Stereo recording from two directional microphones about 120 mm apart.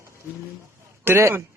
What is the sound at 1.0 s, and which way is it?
Speech, 20° right (ahead or behind).